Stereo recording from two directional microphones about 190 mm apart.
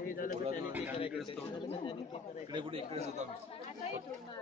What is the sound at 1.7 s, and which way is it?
Speech, 25° left (ahead or behind).